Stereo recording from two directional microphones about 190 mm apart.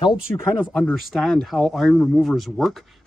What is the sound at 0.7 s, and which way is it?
Speech, 5° left (ahead or behind).